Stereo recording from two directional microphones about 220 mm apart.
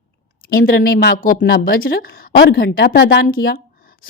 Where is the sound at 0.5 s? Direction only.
40° left (ahead or behind).